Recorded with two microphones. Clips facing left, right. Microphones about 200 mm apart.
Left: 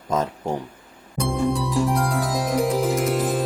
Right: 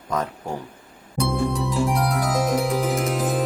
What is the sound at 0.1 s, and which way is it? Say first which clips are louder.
Speech: left 3 dB; 25° left (ahead or behind).